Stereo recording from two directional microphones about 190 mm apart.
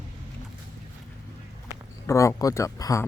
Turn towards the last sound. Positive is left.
turn(degrees=15)  # may be behind; listen again after turning